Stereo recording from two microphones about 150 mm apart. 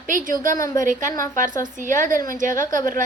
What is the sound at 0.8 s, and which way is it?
Speech, 60° right (ahead or behind).